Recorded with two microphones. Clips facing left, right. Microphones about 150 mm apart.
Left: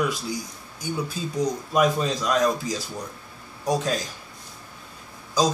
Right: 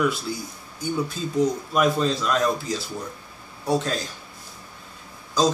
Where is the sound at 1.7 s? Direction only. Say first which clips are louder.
Left 2 dB; 15° left (ahead or behind).